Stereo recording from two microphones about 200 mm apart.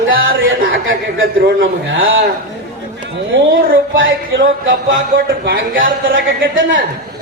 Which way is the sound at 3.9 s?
70° right (ahead or behind).